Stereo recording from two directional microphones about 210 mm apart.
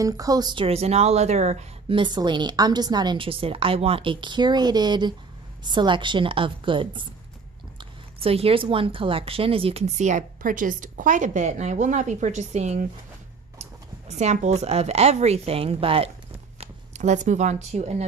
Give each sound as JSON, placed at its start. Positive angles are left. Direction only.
{"t": 0.0, "sound": "speech", "side_deg": -15}
{"t": 8.2, "sound": "a woman's voice", "side_deg": -30}
{"t": 14.0, "sound": "a woman's voice", "side_deg": -35}